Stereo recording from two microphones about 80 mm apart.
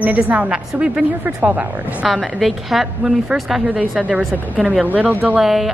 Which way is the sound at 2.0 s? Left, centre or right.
Centre.